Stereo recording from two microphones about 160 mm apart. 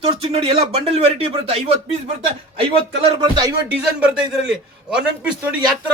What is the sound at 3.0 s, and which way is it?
Music, 25° right (ahead or behind).